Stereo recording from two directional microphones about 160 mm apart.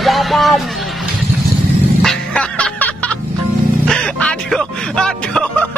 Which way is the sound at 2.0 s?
5° left (ahead or behind).